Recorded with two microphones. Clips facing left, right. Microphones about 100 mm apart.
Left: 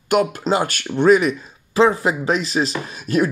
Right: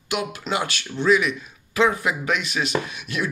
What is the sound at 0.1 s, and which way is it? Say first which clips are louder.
Speech: left 8 dB; 40° left (ahead or behind).